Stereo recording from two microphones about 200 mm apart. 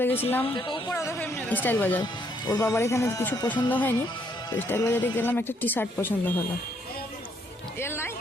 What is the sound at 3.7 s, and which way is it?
Speech, 10° left (ahead or behind).